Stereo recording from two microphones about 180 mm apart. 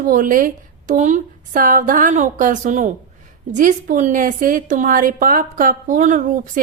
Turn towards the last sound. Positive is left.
turn(degrees=-45)  # may be behind; listen again after turning